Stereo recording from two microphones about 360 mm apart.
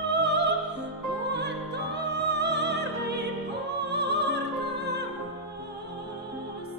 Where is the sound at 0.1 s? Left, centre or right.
Right.